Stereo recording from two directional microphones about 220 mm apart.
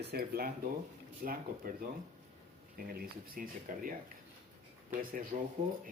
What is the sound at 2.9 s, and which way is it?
Speech, 40° right (ahead or behind).